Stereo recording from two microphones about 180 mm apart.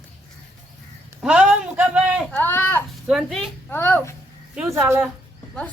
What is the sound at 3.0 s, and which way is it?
Speech, centre (ahead or behind).